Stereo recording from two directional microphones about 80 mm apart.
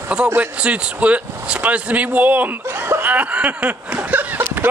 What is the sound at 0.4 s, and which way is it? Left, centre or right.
Speech, centre.